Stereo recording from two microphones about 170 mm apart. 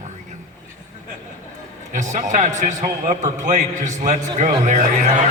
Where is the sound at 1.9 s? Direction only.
45° right (ahead or behind).